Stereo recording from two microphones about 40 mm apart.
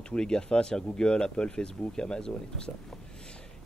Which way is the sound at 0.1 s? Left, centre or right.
Left.